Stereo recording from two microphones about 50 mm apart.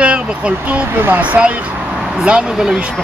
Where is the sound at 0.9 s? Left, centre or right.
Right.